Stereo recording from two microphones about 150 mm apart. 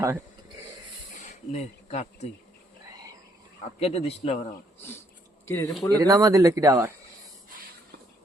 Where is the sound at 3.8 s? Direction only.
45° left (ahead or behind).